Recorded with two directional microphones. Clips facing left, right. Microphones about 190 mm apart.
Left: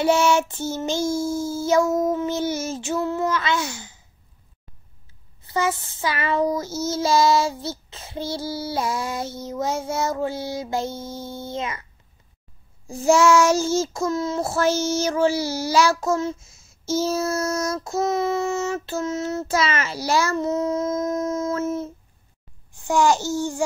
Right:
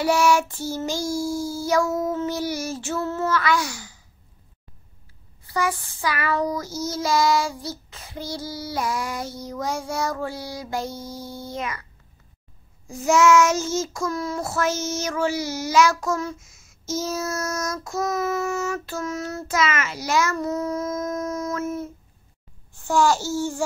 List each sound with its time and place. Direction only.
0.0 s child singing: 25° left (ahead or behind)
5.4 s child singing: 25° left (ahead or behind)
12.8 s child singing: 30° left (ahead or behind)
22.7 s a child's voice: 15° left (ahead or behind)